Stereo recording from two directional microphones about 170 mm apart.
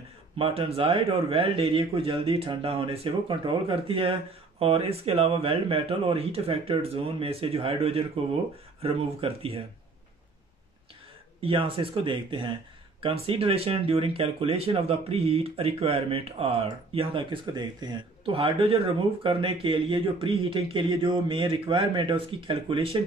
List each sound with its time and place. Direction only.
0.4 s speech: 35° right (ahead or behind)
11.4 s speech: 35° right (ahead or behind)